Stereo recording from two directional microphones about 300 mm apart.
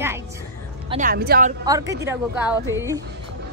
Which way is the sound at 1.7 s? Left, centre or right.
Centre.